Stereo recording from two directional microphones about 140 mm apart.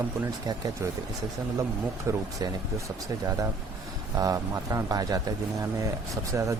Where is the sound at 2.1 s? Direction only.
20° right (ahead or behind).